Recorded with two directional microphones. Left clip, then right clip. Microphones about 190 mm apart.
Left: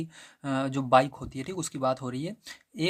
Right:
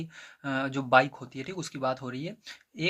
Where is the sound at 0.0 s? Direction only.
35° left (ahead or behind).